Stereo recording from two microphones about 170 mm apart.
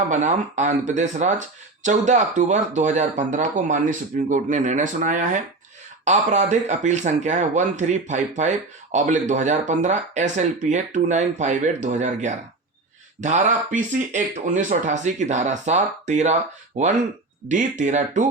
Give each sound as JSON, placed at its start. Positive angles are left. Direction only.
{"t": 0.1, "sound": "speech", "side_deg": -45}